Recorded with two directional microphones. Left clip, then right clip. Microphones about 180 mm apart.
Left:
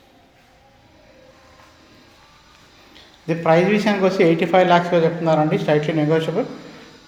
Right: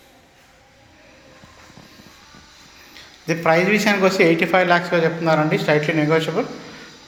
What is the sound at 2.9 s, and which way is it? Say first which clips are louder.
A man's voice: right 1 dB; 10° left (ahead or behind).